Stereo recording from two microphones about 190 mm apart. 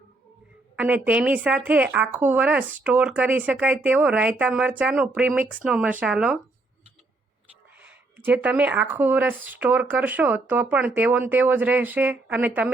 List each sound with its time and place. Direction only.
0.8 s speech: 10° right (ahead or behind)
7.8 s speech: 10° right (ahead or behind)